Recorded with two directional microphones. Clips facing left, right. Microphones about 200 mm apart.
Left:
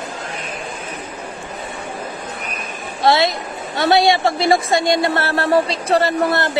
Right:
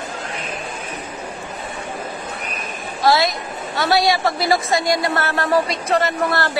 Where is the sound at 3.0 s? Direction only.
25° left (ahead or behind).